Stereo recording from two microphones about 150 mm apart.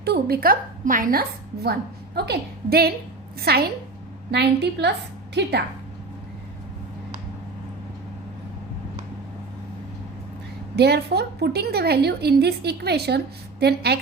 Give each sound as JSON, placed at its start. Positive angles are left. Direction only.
{"t": 0.0, "sound": "a woman's voice", "side_deg": -90}
{"t": 10.8, "sound": "a woman's voice", "side_deg": -90}